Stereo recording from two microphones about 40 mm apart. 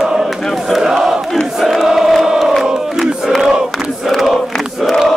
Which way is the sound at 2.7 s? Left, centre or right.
Centre.